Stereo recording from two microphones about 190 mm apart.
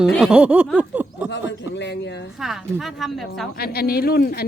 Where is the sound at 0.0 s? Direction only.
Centre (ahead or behind).